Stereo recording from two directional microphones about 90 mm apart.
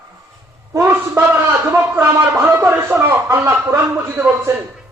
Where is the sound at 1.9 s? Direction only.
25° right (ahead or behind).